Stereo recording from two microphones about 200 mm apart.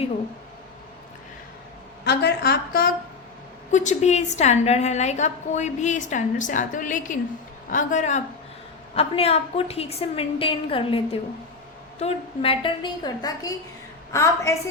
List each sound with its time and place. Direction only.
2.0 s a woman's voice: 55° left (ahead or behind)
3.7 s a woman's voice: 35° left (ahead or behind); by 14.6 s 15° left (ahead or behind)